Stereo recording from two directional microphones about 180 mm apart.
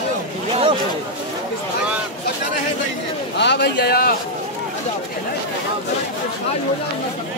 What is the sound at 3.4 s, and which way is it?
Speech, 70° left (ahead or behind).